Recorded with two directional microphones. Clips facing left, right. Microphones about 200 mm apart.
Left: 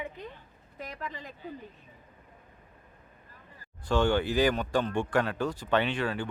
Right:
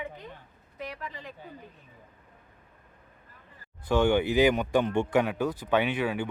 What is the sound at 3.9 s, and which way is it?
Speech, 15° right (ahead or behind).